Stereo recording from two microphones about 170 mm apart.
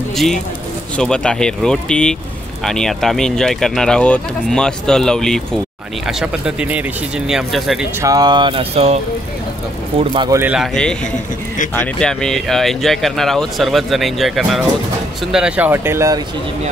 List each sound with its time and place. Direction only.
0.1 s speech: centre (ahead or behind)
8.0 s speech: 20° right (ahead or behind)
10.3 s speech: 10° right (ahead or behind)